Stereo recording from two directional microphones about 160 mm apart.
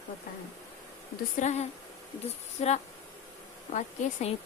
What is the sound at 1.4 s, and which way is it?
Speech, 45° left (ahead or behind).